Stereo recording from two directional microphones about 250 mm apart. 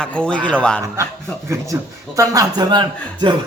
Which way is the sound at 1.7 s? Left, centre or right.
Centre.